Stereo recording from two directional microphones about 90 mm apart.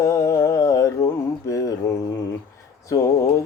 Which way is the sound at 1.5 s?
40° left (ahead or behind).